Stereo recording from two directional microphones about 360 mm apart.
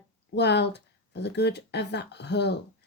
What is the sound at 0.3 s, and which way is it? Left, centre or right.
Speech, left.